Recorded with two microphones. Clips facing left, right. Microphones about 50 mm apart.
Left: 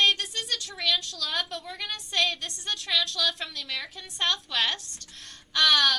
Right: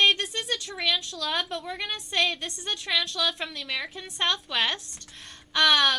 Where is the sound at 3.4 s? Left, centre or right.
Right.